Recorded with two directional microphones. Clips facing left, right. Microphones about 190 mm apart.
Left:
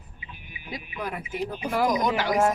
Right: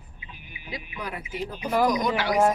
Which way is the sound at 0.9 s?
50° left (ahead or behind).